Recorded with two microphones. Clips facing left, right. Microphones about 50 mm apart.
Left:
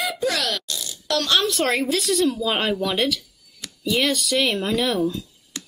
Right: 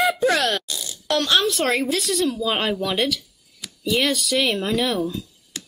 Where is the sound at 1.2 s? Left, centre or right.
Centre.